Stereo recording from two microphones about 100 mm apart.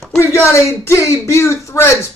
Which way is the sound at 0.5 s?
30° left (ahead or behind).